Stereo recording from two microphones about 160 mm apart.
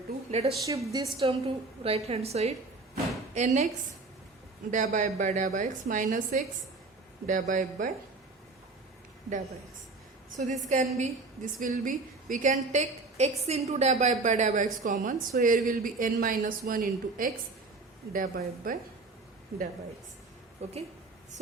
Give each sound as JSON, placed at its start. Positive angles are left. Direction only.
{"t": 0.3, "sound": "a woman's voice", "side_deg": -40}
{"t": 0.6, "sound": "a woman's voice", "side_deg": -20}
{"t": 1.1, "sound": "a woman's voice", "side_deg": -35}
{"t": 4.7, "sound": "a woman's voice", "side_deg": -55}
{"t": 10.3, "sound": "a woman's voice", "side_deg": -50}
{"t": 20.6, "sound": "a woman's voice", "side_deg": -40}